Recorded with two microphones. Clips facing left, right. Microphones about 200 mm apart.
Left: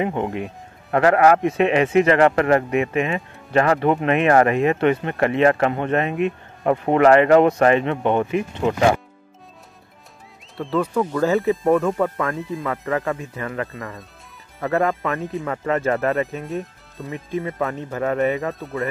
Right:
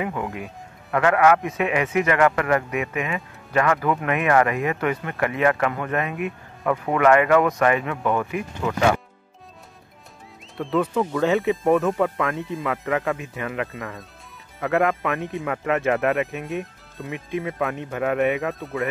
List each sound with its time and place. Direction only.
0.0 s speech: 25° left (ahead or behind)
10.6 s speech: centre (ahead or behind)